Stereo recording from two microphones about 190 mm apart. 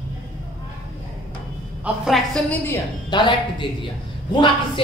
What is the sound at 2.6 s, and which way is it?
A woman's voice, 25° left (ahead or behind).